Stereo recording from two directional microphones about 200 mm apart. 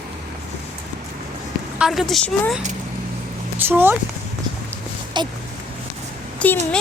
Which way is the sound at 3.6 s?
10° right (ahead or behind).